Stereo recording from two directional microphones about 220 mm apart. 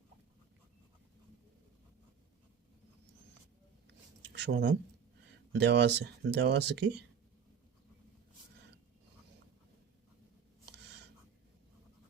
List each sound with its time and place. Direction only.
4.3 s speech: 50° right (ahead or behind)